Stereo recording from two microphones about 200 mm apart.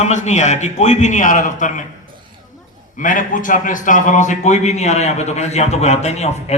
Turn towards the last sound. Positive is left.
turn(degrees=35)  # may be behind; listen again after turning